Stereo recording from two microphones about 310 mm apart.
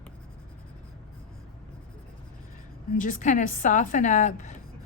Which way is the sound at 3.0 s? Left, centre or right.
Left.